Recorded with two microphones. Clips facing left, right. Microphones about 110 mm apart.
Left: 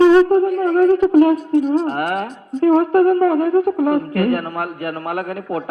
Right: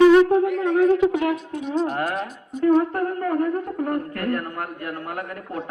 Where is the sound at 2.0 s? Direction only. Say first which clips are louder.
Left 5 dB; 60° left (ahead or behind).